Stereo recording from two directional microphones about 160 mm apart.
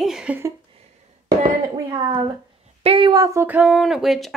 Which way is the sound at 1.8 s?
25° right (ahead or behind).